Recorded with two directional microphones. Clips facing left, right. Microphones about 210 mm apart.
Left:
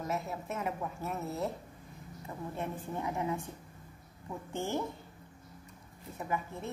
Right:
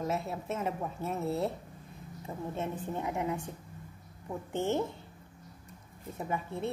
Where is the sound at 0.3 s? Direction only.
25° right (ahead or behind).